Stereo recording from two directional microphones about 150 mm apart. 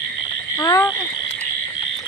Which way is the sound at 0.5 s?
25° left (ahead or behind).